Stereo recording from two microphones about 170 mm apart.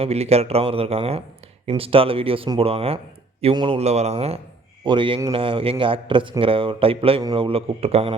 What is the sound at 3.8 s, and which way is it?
Speech, 40° right (ahead or behind).